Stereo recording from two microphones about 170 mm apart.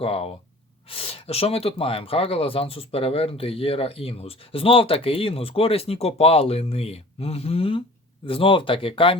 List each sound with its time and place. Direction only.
0.0 s speech: 35° left (ahead or behind)